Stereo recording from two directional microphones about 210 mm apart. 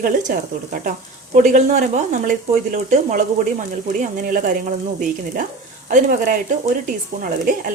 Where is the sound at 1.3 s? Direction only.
35° right (ahead or behind).